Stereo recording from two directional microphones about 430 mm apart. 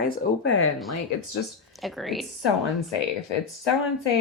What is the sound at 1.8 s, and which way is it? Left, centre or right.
Speech, centre.